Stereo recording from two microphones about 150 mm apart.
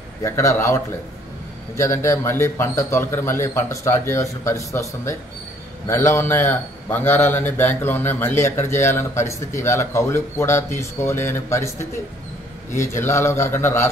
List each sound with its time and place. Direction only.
0.2 s a man's voice: 20° left (ahead or behind)
1.8 s a man's voice: 20° left (ahead or behind)